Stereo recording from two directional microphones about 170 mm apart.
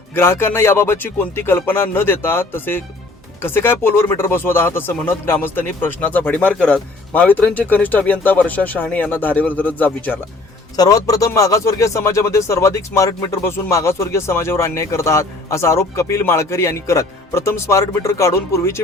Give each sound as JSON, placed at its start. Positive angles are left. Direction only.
{"t": 0.1, "sound": "speech", "side_deg": 15}
{"t": 10.8, "sound": "speech", "side_deg": 20}